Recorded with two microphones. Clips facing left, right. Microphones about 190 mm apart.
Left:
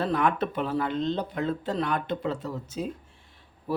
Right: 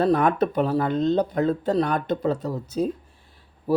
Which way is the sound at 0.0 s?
40° right (ahead or behind).